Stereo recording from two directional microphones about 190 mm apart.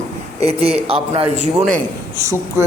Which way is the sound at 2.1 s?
15° right (ahead or behind).